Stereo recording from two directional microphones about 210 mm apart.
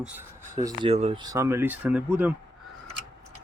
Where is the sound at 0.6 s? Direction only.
20° right (ahead or behind).